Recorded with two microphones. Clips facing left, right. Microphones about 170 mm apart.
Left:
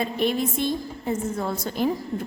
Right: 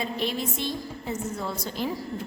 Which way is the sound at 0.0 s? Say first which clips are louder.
Left 5 dB; 50° left (ahead or behind).